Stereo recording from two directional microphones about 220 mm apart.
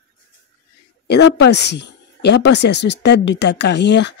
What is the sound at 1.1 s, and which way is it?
Speech, 50° left (ahead or behind).